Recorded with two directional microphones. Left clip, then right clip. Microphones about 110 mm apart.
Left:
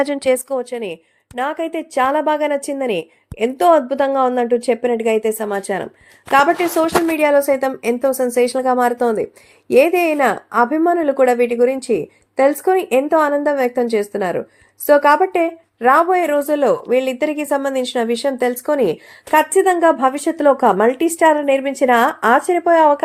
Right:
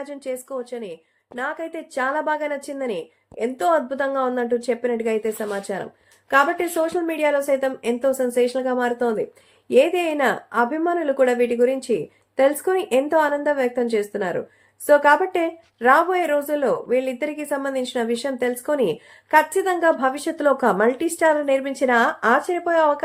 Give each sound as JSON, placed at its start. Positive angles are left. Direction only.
{"t": 1.4, "sound": "a woman's voice", "side_deg": 90}
{"t": 6.6, "sound": "speech", "side_deg": 45}
{"t": 7.2, "sound": "a woman's voice", "side_deg": 55}
{"t": 10.2, "sound": "a woman's voice", "side_deg": 30}
{"t": 10.6, "sound": "speech", "side_deg": 45}
{"t": 19.3, "sound": "speech", "side_deg": 45}